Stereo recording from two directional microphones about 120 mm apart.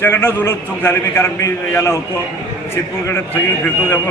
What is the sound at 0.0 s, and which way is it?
A man's voice, 20° left (ahead or behind).